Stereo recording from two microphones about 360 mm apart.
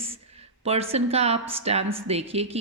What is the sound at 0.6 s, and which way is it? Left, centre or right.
A woman's voice, centre.